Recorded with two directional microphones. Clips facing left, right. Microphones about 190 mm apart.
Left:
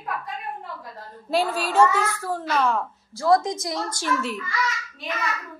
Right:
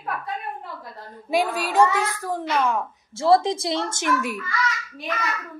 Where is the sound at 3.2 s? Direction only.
30° right (ahead or behind); by 4.5 s 15° right (ahead or behind).